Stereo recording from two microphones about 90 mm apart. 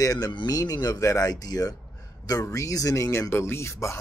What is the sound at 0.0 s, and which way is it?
A man's voice, 45° left (ahead or behind).